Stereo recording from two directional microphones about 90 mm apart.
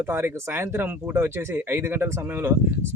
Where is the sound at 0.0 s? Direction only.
25° right (ahead or behind).